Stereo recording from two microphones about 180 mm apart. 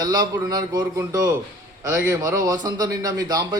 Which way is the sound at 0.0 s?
20° right (ahead or behind).